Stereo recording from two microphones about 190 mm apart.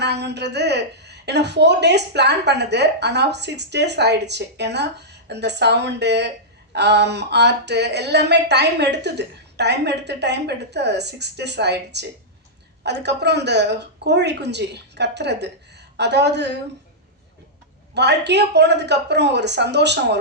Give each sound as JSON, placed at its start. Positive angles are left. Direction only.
{"t": 0.0, "sound": "a woman's voice", "side_deg": -60}
{"t": 17.9, "sound": "a woman's voice", "side_deg": -65}